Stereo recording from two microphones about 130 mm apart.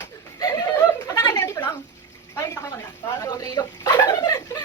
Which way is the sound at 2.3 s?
20° left (ahead or behind).